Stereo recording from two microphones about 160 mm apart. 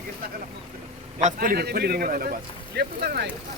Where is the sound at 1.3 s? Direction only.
70° right (ahead or behind).